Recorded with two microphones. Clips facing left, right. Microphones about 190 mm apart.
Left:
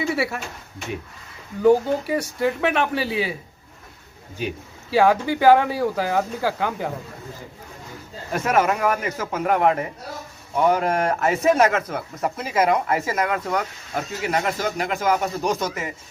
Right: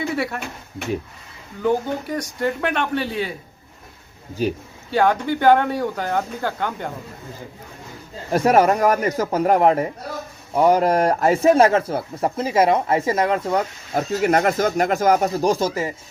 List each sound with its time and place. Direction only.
1.6 s speech: 5° left (ahead or behind)
4.4 s speech: 35° right (ahead or behind)
4.9 s speech: 5° left (ahead or behind)
8.3 s speech: 35° right (ahead or behind)
14.1 s speech: 45° right (ahead or behind); by 15.9 s 30° right (ahead or behind)